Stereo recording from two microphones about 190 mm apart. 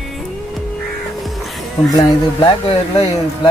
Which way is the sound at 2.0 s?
25° left (ahead or behind).